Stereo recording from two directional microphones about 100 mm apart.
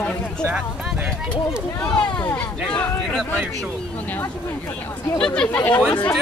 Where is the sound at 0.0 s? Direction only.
10° left (ahead or behind).